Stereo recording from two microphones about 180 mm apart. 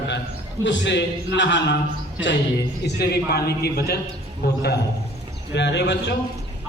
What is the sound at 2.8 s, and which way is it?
A man's voice, 65° left (ahead or behind).